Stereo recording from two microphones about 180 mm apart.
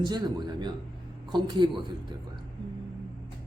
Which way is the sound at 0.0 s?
25° right (ahead or behind).